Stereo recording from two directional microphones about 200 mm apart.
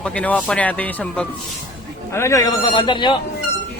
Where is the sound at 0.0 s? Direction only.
5° left (ahead or behind); by 3.2 s 25° left (ahead or behind).